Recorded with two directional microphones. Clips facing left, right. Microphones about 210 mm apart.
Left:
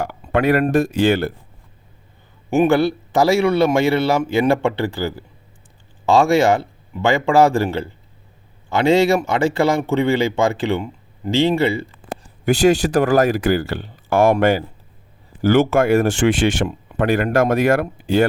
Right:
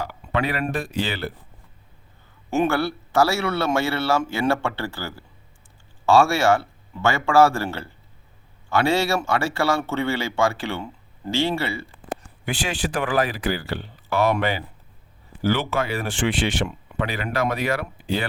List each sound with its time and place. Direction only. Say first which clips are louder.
0.0 s speech: left 7 dB; 50° left (ahead or behind)
2.5 s a man's voice: left 7 dB; 15° left (ahead or behind)
12.0 s speech: left 11 dB; 40° left (ahead or behind)